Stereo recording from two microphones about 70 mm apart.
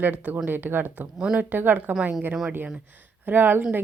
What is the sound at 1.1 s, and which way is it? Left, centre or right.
Speech, centre.